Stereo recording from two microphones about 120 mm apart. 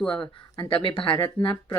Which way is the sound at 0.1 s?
45° left (ahead or behind).